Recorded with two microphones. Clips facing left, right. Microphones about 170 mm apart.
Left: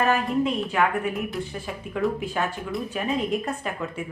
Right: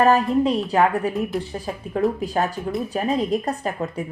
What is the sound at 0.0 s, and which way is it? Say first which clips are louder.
Speech: right 5 dB; 35° right (ahead or behind).